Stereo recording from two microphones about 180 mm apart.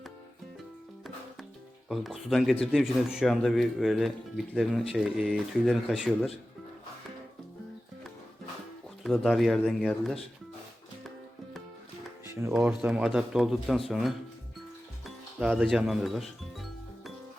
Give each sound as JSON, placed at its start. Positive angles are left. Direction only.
{"t": 1.9, "sound": "speech", "side_deg": 0}
{"t": 9.0, "sound": "speech", "side_deg": 0}
{"t": 12.2, "sound": "music", "side_deg": -15}
{"t": 12.5, "sound": "speech", "side_deg": -5}
{"t": 15.0, "sound": "music", "side_deg": -5}